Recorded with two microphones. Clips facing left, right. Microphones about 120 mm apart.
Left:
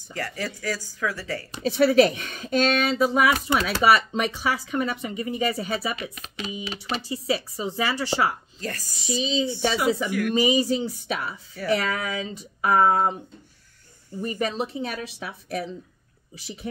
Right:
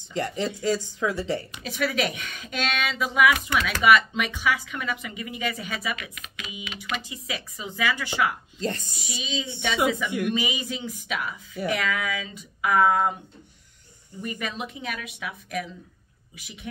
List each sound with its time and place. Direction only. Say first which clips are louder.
0.1 s speech: right 4 dB; 20° right (ahead or behind)
1.5 s speech: left 8 dB; 35° left (ahead or behind)
8.5 s speech: right 4 dB; 25° right (ahead or behind)
8.9 s speech: left 7 dB; 35° left (ahead or behind)
14.2 s speech: left 5 dB; 35° left (ahead or behind)